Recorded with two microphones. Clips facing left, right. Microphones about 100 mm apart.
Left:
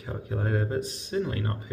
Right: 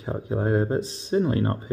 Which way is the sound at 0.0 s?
25° right (ahead or behind).